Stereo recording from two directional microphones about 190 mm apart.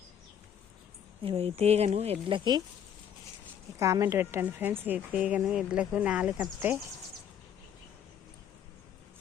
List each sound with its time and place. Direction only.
1.2 s speech: 30° right (ahead or behind)
3.8 s a woman's voice: 15° right (ahead or behind)